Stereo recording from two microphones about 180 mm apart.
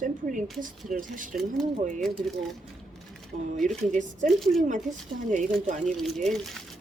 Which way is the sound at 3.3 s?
45° right (ahead or behind).